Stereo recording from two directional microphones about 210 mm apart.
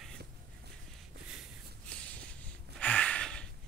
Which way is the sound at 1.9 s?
5° left (ahead or behind).